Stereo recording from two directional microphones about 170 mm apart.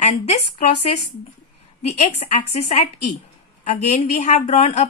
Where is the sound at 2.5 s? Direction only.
40° left (ahead or behind).